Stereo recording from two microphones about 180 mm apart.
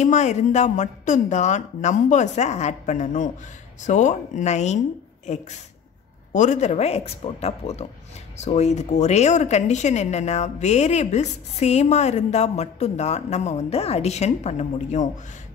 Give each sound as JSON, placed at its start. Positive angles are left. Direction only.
{"t": 0.0, "sound": "speech", "side_deg": 40}